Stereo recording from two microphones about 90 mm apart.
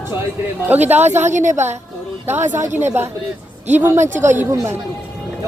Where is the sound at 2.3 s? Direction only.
25° right (ahead or behind).